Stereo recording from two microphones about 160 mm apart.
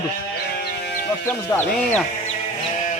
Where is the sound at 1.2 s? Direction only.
15° left (ahead or behind).